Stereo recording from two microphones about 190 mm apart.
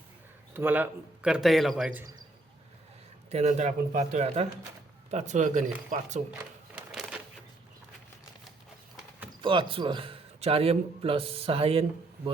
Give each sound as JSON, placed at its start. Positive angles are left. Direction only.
{"t": 0.5, "sound": "a man's voice", "side_deg": -10}
{"t": 3.2, "sound": "speech", "side_deg": -35}
{"t": 6.7, "sound": "a sound", "side_deg": -5}
{"t": 9.4, "sound": "a man's voice", "side_deg": -25}